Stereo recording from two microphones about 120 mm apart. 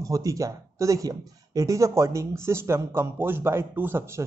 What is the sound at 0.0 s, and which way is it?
Speech, 25° right (ahead or behind).